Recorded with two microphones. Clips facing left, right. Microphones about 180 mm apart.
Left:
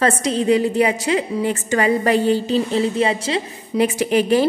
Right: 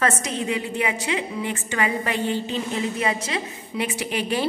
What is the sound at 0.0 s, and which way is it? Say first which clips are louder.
A woman's voice: left 6 dB; 30° left (ahead or behind).